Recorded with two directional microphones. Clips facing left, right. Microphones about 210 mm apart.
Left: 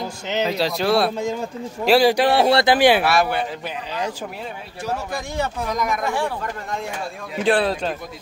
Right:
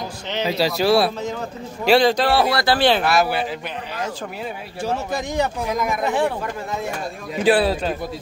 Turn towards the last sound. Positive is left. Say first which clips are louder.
# right 2 dB
turn(degrees=-5)  # may be behind; listen again after turning